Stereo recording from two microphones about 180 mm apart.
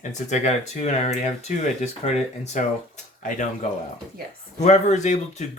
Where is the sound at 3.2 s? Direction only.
45° left (ahead or behind).